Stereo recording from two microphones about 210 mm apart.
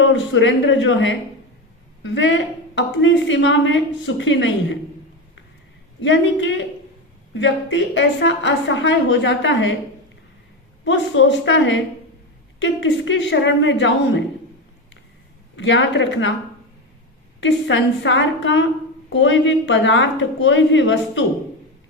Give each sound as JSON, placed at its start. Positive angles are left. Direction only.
{"t": 0.0, "sound": "a woman's voice", "side_deg": 60}
{"t": 6.0, "sound": "a woman's voice", "side_deg": 60}
{"t": 10.8, "sound": "a woman's voice", "side_deg": 60}
{"t": 15.5, "sound": "a woman's voice", "side_deg": 60}
{"t": 17.4, "sound": "a woman's voice", "side_deg": 60}